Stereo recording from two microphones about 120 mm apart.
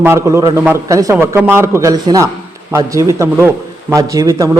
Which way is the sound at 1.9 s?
35° right (ahead or behind).